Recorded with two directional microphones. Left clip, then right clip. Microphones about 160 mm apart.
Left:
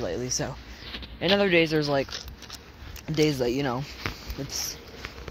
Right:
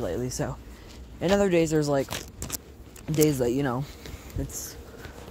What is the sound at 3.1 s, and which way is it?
Speech, 35° right (ahead or behind).